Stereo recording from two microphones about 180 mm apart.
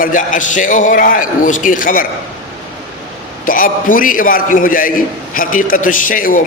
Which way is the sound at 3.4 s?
50° left (ahead or behind).